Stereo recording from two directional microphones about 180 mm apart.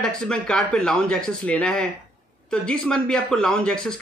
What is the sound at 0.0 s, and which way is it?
A man's voice, 5° left (ahead or behind).